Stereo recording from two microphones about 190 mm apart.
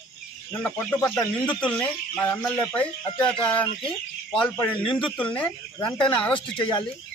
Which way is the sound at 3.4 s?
5° left (ahead or behind).